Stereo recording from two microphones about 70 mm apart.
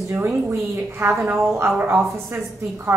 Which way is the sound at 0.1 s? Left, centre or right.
Right.